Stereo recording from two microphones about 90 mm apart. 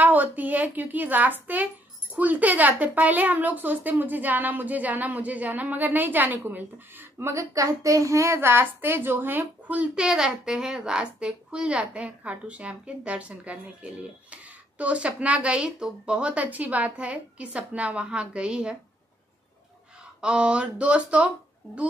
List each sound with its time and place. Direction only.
0.0 s speech: 20° right (ahead or behind)
7.5 s a child's voice: 40° right (ahead or behind); by 18.8 s 10° right (ahead or behind)
20.2 s a child's voice: 10° right (ahead or behind)